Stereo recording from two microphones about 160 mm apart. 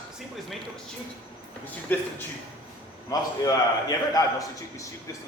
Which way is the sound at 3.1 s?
25° left (ahead or behind).